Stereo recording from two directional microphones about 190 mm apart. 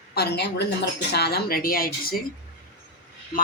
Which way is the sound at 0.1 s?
60° left (ahead or behind).